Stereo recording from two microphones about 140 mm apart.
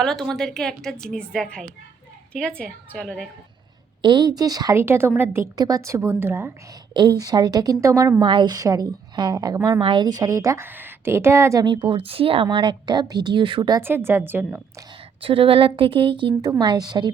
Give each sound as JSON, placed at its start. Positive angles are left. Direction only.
{"t": 0.0, "sound": "a woman's voice", "side_deg": 5}
{"t": 2.9, "sound": "a woman's voice", "side_deg": 10}
{"t": 4.0, "sound": "a woman's voice", "side_deg": -30}
{"t": 6.9, "sound": "a woman's voice", "side_deg": -30}
{"t": 11.6, "sound": "a woman's voice", "side_deg": -35}
{"t": 13.8, "sound": "a woman's voice", "side_deg": -15}
{"t": 15.2, "sound": "a woman's voice", "side_deg": -40}